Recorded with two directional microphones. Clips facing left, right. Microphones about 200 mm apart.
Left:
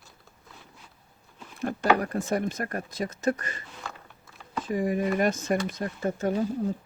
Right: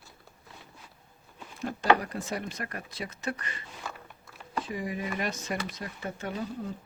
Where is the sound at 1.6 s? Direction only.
55° left (ahead or behind).